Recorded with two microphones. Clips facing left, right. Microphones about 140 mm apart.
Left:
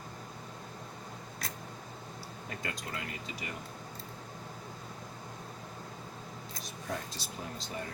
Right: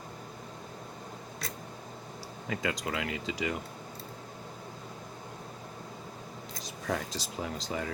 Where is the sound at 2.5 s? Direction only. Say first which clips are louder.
Right 8 dB; 90° right.